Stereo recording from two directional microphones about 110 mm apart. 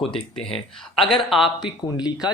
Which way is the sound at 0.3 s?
5° left (ahead or behind).